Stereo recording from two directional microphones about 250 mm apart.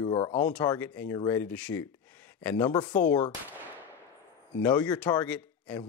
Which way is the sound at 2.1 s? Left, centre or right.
Centre.